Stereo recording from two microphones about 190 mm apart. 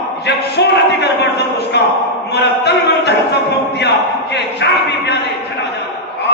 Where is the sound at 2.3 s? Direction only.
65° left (ahead or behind).